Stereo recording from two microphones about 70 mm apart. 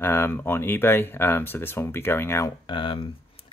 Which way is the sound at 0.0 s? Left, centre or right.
Left.